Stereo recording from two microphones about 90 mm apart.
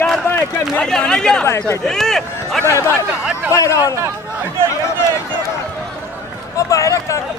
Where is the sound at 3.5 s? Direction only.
35° left (ahead or behind).